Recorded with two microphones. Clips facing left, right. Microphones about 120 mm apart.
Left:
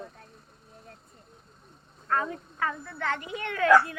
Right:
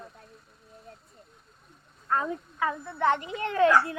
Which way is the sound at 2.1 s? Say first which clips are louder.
Right 1 dB; 15° right (ahead or behind).